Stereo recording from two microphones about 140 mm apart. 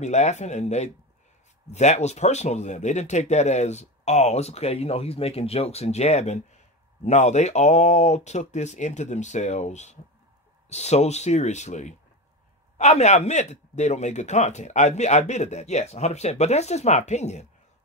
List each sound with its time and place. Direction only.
0.0 s speech: 55° left (ahead or behind)